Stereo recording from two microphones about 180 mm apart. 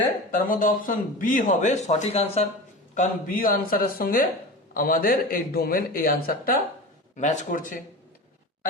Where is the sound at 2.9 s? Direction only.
45° left (ahead or behind).